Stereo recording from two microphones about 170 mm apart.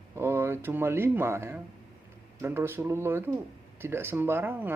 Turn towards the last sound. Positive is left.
turn(degrees=-10)  # may be behind; listen again after turning